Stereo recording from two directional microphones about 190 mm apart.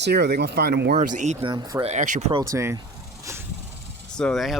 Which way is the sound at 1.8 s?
40° right (ahead or behind).